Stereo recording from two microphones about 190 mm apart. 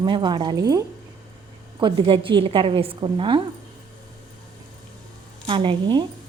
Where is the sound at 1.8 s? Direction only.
25° right (ahead or behind).